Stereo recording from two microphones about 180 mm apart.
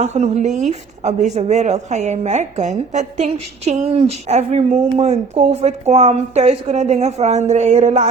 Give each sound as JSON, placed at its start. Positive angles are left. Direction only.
{"t": 0.0, "sound": "a woman's voice", "side_deg": -40}